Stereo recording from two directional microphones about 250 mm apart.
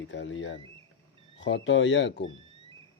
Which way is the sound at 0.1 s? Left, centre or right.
Left.